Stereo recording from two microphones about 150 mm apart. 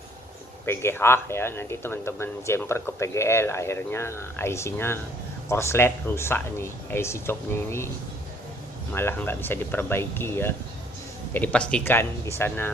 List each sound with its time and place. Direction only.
0.7 s speech: 15° left (ahead or behind)
8.9 s speech: 15° left (ahead or behind)